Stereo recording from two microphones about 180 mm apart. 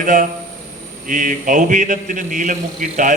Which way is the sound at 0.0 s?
50° right (ahead or behind).